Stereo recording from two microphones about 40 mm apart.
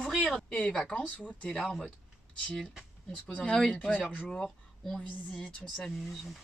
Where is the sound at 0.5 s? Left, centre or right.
Left.